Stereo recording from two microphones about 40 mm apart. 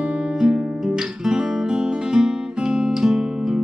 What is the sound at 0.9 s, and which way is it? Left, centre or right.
Guitar, centre.